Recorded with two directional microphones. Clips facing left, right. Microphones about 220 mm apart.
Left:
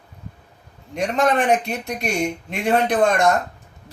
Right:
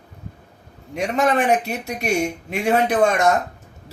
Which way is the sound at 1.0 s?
5° right (ahead or behind).